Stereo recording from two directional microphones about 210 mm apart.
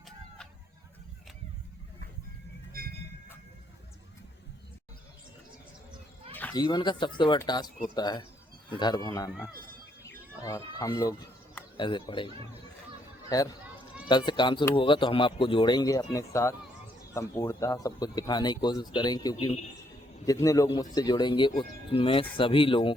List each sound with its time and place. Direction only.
6.3 s cat: 10° left (ahead or behind)
6.6 s speech: 20° left (ahead or behind)
13.3 s speech: 15° left (ahead or behind)